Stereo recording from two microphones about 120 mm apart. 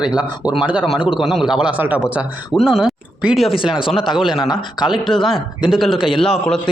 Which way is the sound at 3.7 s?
45° left (ahead or behind).